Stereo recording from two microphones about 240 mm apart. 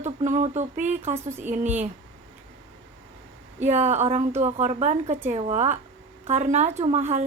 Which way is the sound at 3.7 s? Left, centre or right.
Right.